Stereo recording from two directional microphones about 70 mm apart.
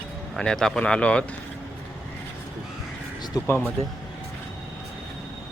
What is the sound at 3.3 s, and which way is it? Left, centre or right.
Speech, left.